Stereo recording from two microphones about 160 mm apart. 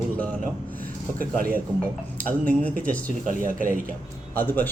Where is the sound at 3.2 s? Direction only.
55° right (ahead or behind).